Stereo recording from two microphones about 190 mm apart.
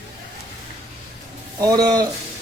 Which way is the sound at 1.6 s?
20° right (ahead or behind).